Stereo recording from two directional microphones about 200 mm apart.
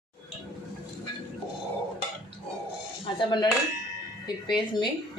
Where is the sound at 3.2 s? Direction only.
25° left (ahead or behind).